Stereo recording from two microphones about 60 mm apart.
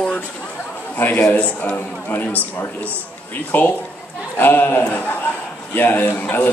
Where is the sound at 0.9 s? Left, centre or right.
Left.